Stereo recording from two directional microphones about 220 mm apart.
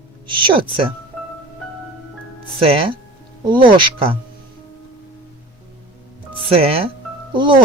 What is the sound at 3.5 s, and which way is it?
Speech, 20° right (ahead or behind).